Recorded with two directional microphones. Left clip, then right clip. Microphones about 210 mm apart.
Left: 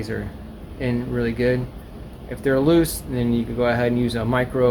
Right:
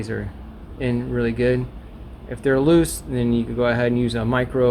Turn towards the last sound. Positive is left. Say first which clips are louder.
# even
turn(degrees=-25)  # may be behind; listen again after turning